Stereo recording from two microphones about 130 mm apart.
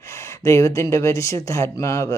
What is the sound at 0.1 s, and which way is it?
Speech, 20° left (ahead or behind).